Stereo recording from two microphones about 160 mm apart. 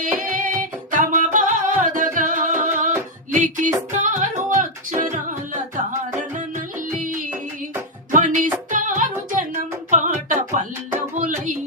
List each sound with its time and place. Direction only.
0.0 s music: 55° right (ahead or behind)
8.1 s music: 50° right (ahead or behind)